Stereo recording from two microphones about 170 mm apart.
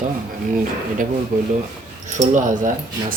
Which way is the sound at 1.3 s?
55° right (ahead or behind).